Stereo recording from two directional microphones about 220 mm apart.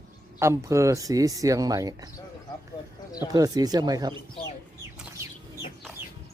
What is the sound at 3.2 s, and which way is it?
Speech, 15° right (ahead or behind).